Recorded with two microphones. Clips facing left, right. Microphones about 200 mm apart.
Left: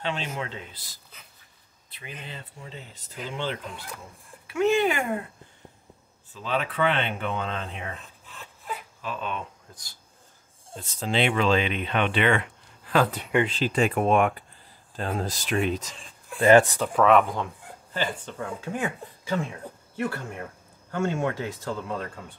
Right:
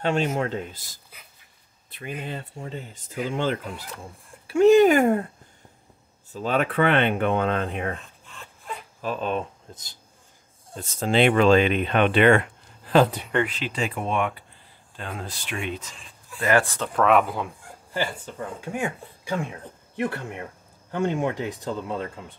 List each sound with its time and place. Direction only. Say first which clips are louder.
0.0 s speech: right 8 dB; 45° right (ahead or behind)
1.9 s speech: right 8 dB; 50° right (ahead or behind)
4.5 s speech: right 8 dB; 35° right (ahead or behind)
6.3 s speech: right 5 dB; 45° right (ahead or behind)
8.3 s a sound: left 1 dB; 5° left (ahead or behind)
9.0 s speech: right 7 dB; 40° right (ahead or behind)
11.0 s speech: right 5 dB; 50° right (ahead or behind)
13.5 s speech: left 5 dB; 35° left (ahead or behind)
13.7 s speech: left 5 dB; 55° left (ahead or behind)
16.3 s speech: left 5 dB; 25° left (ahead or behind)
16.9 s speech: even; centre (ahead or behind); by 22.2 s 20° right (ahead or behind)